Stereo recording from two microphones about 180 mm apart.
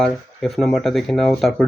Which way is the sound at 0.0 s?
Centre (ahead or behind).